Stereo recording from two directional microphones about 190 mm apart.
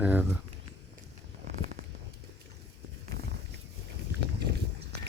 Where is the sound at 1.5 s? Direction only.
50° right (ahead or behind).